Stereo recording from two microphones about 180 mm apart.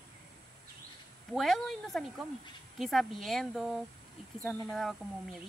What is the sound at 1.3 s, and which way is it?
Speech, centre (ahead or behind).